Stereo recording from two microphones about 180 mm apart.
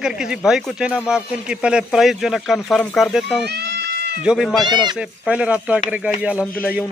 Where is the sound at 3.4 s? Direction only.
65° right (ahead or behind).